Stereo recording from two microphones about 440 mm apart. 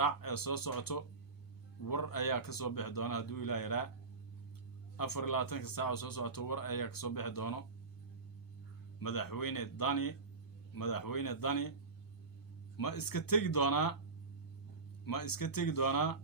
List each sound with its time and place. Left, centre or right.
0.0 s speech: left
4.9 s speech: left
9.0 s speech: left
12.7 s speech: left
15.0 s speech: left